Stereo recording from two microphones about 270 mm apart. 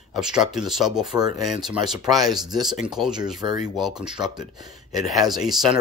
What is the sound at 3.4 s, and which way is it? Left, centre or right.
Speech, centre.